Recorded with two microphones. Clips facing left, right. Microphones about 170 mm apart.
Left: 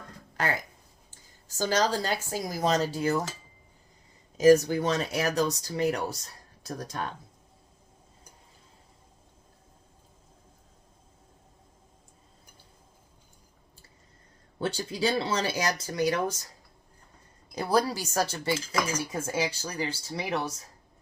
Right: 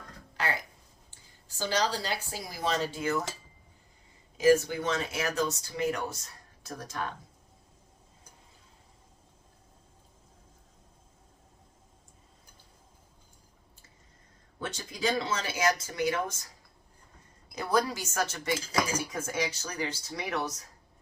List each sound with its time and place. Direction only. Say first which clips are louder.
0.4 s a sound: left 3 dB; 45° left (ahead or behind)
1.1 s a woman's voice: left 10 dB; 45° left (ahead or behind)
4.4 s speech: left 4 dB; 40° left (ahead or behind)
14.6 s speech: left 4 dB; 30° left (ahead or behind)
17.5 s speech: left 2 dB; 35° left (ahead or behind)